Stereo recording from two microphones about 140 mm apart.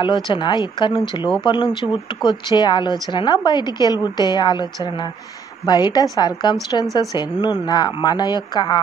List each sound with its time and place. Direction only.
0.0 s a woman's voice: 35° left (ahead or behind)